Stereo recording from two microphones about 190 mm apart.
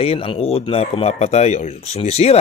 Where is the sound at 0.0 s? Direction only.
30° left (ahead or behind).